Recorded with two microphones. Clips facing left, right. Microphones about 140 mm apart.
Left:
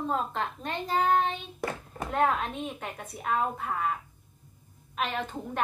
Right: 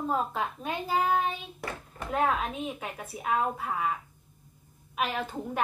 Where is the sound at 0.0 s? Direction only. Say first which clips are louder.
Right 1 dB; 5° right (ahead or behind).